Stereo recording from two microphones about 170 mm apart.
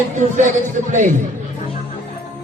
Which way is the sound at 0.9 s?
45° right (ahead or behind).